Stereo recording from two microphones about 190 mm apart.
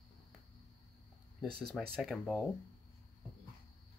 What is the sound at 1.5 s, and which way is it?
Speech, 5° left (ahead or behind).